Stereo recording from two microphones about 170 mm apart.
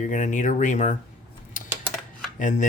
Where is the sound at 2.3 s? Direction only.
50° left (ahead or behind).